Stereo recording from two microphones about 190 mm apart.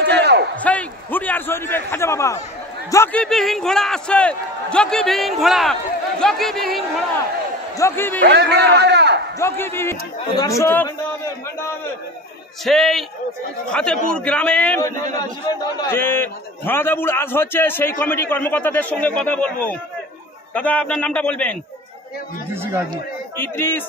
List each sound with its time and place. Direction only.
0.1 s a sound: 60° right (ahead or behind)
0.6 s a sound: 10° left (ahead or behind)
2.9 s a man's voice: 10° left (ahead or behind)
7.7 s a man's voice: 15° left (ahead or behind)
8.2 s a man's voice: 60° right (ahead or behind)
9.4 s a man's voice: 10° left (ahead or behind)
12.6 s a man's voice: centre (ahead or behind)
22.5 s speech: 10° right (ahead or behind)
23.3 s a man's voice: 10° left (ahead or behind)